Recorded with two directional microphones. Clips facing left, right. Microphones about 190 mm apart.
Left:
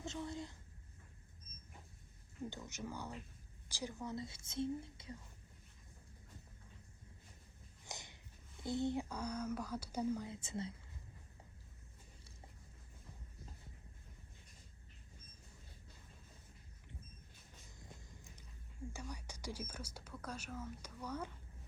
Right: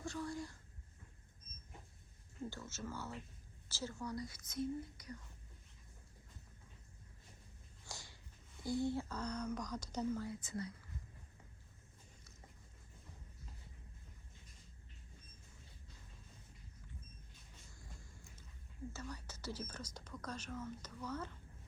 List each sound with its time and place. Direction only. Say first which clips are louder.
0.0 s speech: right 1 dB; 20° left (ahead or behind)
2.5 s speech: even; 15° left (ahead or behind)
7.9 s a sound: left 2 dB; 20° left (ahead or behind)
8.6 s speech: even; 20° left (ahead or behind)
10.2 s speech: even; 25° left (ahead or behind)
17.7 s a sound: left 3 dB; 20° left (ahead or behind)
18.9 s speech: even; 15° left (ahead or behind)